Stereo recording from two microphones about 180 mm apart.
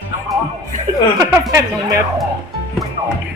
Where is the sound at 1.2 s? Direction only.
15° right (ahead or behind).